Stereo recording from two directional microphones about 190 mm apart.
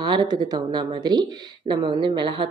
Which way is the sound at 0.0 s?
25° right (ahead or behind).